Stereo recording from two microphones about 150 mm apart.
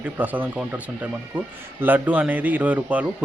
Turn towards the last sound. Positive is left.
turn(degrees=-10)  # may be behind; listen again after turning